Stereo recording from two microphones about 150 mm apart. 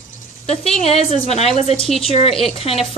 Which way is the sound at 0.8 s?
45° left (ahead or behind).